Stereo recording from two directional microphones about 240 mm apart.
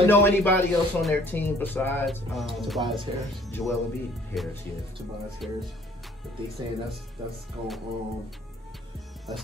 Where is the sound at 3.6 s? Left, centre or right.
Centre.